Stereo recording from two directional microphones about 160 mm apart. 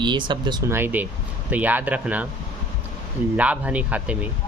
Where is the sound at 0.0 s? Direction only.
30° right (ahead or behind).